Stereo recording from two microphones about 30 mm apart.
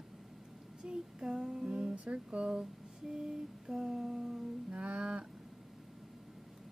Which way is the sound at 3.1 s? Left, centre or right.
Right.